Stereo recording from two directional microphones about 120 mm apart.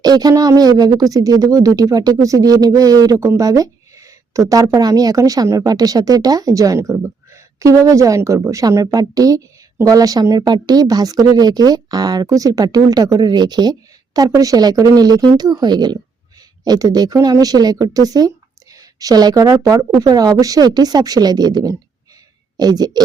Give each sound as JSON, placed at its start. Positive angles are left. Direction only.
{"t": 0.0, "sound": "speech", "side_deg": -35}